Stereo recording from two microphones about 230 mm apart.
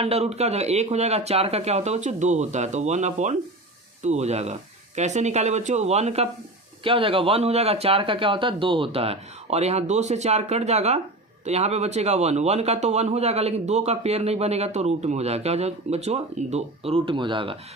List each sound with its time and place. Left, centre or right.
0.0 s speech: right